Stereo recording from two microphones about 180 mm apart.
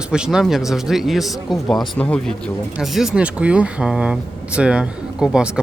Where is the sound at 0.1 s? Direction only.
5° right (ahead or behind).